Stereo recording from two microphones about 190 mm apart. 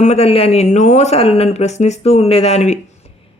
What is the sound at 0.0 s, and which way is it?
Speech, 35° left (ahead or behind).